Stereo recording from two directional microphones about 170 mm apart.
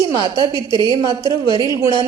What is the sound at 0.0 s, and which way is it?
A woman's voice, 20° right (ahead or behind).